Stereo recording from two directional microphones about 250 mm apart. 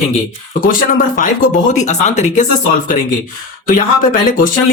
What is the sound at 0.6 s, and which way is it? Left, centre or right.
Speech, left.